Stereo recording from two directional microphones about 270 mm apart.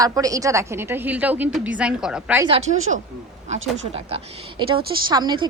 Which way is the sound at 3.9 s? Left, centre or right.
Centre.